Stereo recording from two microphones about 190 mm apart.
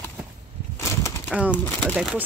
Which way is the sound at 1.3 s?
5° right (ahead or behind).